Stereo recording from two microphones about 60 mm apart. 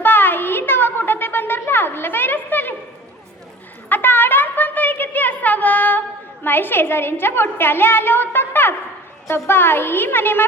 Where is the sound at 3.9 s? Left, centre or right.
Left.